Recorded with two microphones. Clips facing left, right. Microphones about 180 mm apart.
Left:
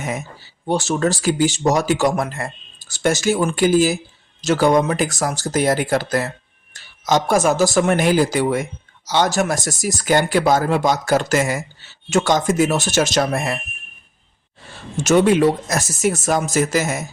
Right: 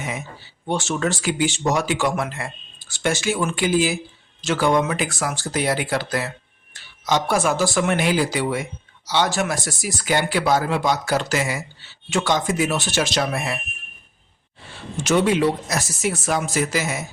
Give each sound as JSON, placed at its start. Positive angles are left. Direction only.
{"t": 0.7, "sound": "speech", "side_deg": 35}
{"t": 14.9, "sound": "speech", "side_deg": 45}